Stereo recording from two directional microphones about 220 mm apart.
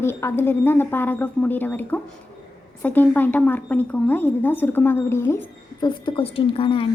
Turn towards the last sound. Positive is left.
turn(degrees=25)  # may be behind; listen again after turning